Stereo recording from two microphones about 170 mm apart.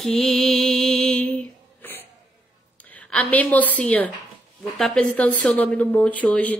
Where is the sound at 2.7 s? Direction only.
10° left (ahead or behind).